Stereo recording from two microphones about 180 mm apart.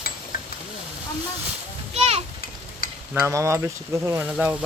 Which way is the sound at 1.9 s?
35° right (ahead or behind).